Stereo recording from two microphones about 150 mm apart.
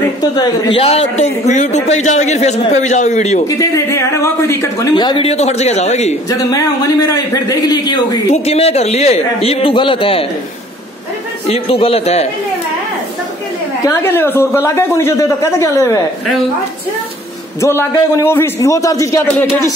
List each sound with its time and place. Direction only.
0.7 s a man's voice: 45° left (ahead or behind)
3.4 s a woman's voice: 20° left (ahead or behind); by 6.1 s 50° left (ahead or behind)
6.2 s a woman's voice: 25° left (ahead or behind)
8.3 s a man's voice: 45° left (ahead or behind)
11.4 s a man's voice: 40° left (ahead or behind)
13.8 s a man's voice: 15° left (ahead or behind)
17.6 s a woman's voice: 15° left (ahead or behind)